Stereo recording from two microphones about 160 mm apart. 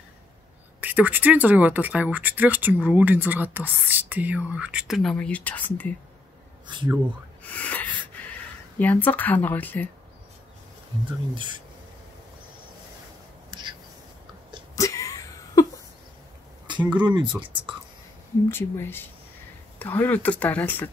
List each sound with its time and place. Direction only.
0.7 s speech: 10° right (ahead or behind); by 5.9 s 10° left (ahead or behind)
7.4 s a sound: 10° left (ahead or behind)
8.7 s speech: 10° left (ahead or behind)
10.9 s speech: 30° right (ahead or behind)
13.5 s whispering: 30° right (ahead or behind)
14.8 s a sound: 20° left (ahead or behind)
17.0 s speech: 30° right (ahead or behind)
18.5 s speech: 15° left (ahead or behind)